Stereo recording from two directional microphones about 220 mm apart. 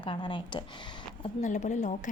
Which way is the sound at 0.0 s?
20° left (ahead or behind).